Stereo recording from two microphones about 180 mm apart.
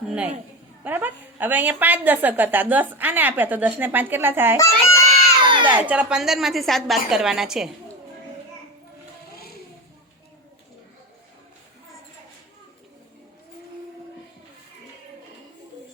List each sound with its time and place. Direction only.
0.1 s a woman's voice: 5° right (ahead or behind)
4.5 s a child's voice: 15° left (ahead or behind)
5.6 s a woman's voice: 10° right (ahead or behind)